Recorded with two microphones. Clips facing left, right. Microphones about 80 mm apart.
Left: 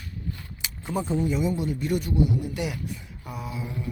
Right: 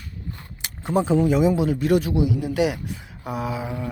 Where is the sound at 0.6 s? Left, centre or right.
Right.